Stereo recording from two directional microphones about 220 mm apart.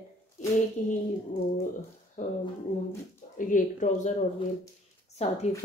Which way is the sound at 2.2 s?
35° left (ahead or behind).